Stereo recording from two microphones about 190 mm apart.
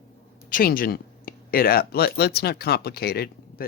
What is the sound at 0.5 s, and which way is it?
Speech, 45° left (ahead or behind).